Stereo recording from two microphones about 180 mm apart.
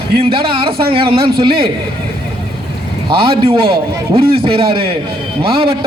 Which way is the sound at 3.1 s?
30° right (ahead or behind).